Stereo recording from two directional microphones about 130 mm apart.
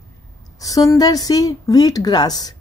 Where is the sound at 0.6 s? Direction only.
25° left (ahead or behind).